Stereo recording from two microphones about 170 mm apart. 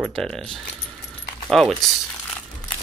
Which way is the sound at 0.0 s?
5° left (ahead or behind).